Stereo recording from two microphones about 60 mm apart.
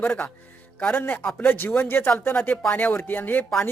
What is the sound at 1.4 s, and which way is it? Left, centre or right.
Speech, left.